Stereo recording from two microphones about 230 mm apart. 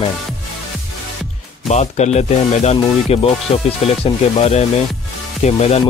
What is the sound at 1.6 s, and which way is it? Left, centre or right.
Speech, left.